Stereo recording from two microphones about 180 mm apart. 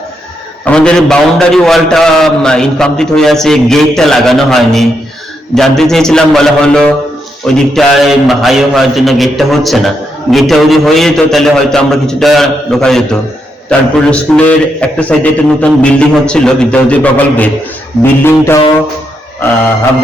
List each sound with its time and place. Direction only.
0.6 s a man's voice: 5° left (ahead or behind)